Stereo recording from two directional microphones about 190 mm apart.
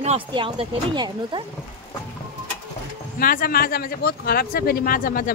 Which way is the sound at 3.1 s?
50° left (ahead or behind).